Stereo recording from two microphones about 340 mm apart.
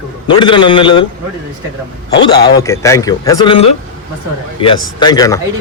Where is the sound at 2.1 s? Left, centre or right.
Left.